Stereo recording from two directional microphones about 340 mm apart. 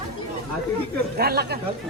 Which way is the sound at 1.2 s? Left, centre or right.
Right.